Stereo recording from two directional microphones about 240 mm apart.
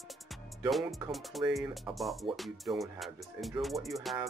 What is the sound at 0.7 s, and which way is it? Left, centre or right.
Speech, centre.